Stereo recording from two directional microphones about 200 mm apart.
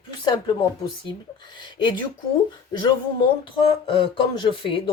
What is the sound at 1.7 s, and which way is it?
Speech, 25° left (ahead or behind).